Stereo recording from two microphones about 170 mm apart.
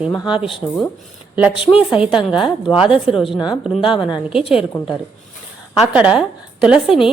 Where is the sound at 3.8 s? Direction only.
30° left (ahead or behind).